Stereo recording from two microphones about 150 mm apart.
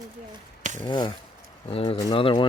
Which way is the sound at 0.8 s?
30° left (ahead or behind).